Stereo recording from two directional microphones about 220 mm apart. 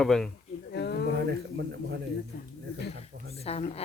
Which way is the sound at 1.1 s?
50° right (ahead or behind).